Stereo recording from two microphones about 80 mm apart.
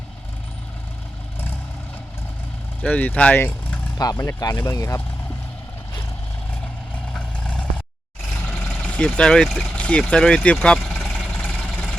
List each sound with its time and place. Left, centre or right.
2.8 s speech: left
3.3 s vehicle: left
3.9 s speech: left
4.7 s speech: left
7.1 s vehicle: centre
8.4 s vehicle: left
8.7 s speech: centre
9.7 s vehicle: centre
10.1 s speech: centre
10.9 s vehicle: centre